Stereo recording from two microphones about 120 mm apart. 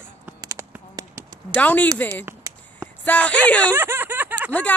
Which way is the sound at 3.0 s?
10° left (ahead or behind).